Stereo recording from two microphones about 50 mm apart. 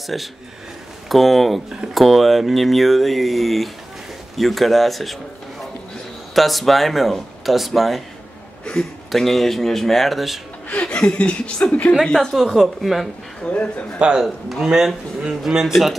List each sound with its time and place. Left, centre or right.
0.0 s speech: centre
9.1 s speech: centre
10.8 s speech: centre
12.1 s a woman's voice: centre
12.4 s speech: centre
13.5 s a man's voice: left
13.9 s speech: right
14.2 s speech: centre